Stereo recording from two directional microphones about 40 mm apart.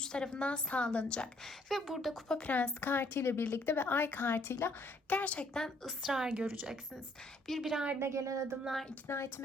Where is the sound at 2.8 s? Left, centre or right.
Left.